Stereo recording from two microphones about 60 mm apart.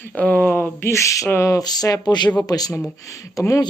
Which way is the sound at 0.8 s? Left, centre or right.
Left.